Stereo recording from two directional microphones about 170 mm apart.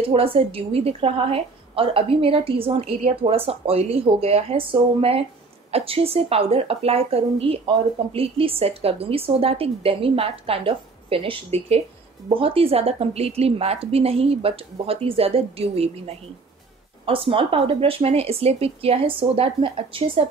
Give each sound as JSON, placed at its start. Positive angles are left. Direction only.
{"t": 0.1, "sound": "a woman's voice", "side_deg": -35}